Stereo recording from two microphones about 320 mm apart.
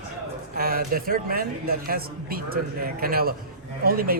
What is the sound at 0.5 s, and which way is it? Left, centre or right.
Speech, right.